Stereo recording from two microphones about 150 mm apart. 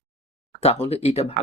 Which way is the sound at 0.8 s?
45° left (ahead or behind).